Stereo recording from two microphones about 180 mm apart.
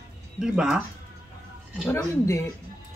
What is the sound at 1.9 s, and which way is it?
Speech, 15° left (ahead or behind).